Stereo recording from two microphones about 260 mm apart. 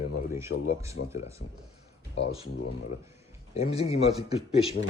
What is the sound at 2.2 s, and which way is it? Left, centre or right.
Speech, left.